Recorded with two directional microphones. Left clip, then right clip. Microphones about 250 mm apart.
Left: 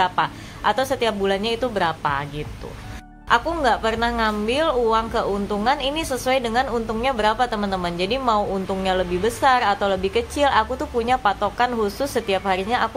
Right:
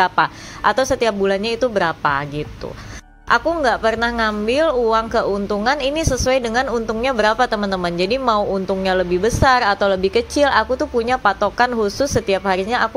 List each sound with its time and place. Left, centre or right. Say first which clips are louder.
0.0 s a woman's voice: right 4 dB; right